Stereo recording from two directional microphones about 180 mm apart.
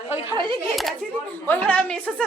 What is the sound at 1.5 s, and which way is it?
Speech, 5° left (ahead or behind).